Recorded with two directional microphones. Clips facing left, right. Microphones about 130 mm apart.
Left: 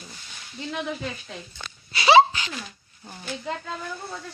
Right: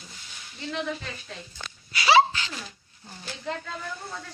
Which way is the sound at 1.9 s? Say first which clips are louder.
Left 4 dB; 25° left (ahead or behind).